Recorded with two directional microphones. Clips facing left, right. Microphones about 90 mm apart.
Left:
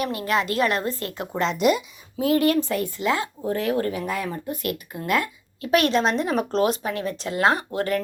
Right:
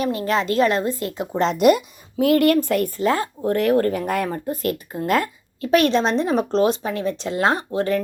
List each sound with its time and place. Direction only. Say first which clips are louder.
0.0 s speech: right 3 dB; 30° right (ahead or behind)
1.4 s speech: right 5 dB; 45° right (ahead or behind)
3.0 s speech: right 2 dB; 40° right (ahead or behind)
3.4 s speech: right 7 dB; 60° right (ahead or behind)
4.3 s speech: right 4 dB; 35° right (ahead or behind)